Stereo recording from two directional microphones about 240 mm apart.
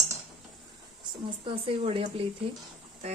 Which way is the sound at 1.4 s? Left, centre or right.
Right.